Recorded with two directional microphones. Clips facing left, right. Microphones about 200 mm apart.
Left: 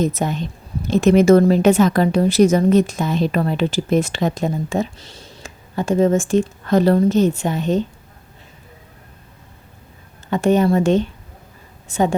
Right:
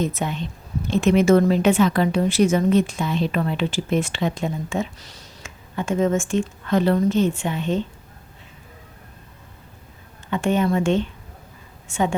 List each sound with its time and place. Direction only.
0.0 s a woman's voice: 40° left (ahead or behind)
10.2 s a woman's voice: 40° left (ahead or behind)